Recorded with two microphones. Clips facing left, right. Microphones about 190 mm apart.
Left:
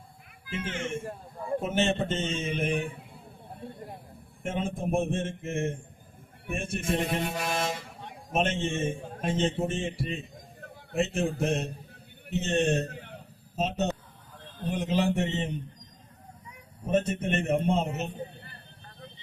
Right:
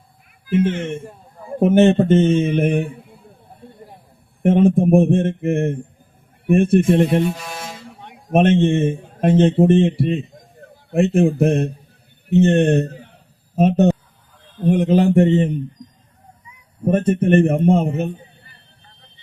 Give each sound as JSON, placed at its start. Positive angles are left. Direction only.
{"t": 0.5, "sound": "speech", "side_deg": -55}
{"t": 4.4, "sound": "a man's voice", "side_deg": -60}
{"t": 12.9, "sound": "a sound", "side_deg": 60}
{"t": 13.6, "sound": "speech", "side_deg": -60}
{"t": 16.8, "sound": "speech", "side_deg": -55}